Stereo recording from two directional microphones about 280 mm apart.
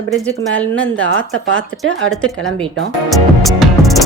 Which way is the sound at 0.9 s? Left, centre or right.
Right.